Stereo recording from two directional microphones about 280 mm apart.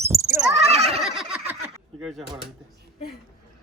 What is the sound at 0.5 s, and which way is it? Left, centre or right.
Speech, right.